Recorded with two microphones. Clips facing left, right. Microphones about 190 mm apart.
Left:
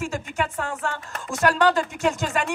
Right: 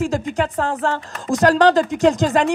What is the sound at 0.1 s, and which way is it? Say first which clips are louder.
Speech: right 7 dB; 35° right (ahead or behind).